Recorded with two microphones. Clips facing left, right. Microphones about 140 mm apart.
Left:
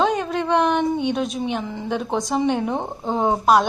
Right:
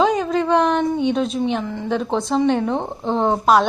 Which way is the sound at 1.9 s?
5° left (ahead or behind).